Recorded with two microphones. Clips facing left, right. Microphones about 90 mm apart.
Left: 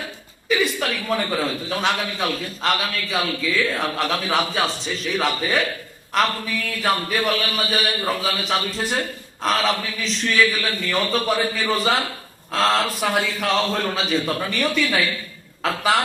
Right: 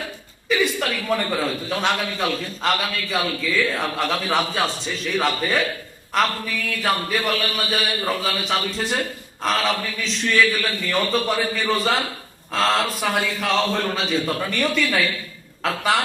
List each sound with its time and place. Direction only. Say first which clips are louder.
0.4 s a man's voice: even; centre (ahead or behind)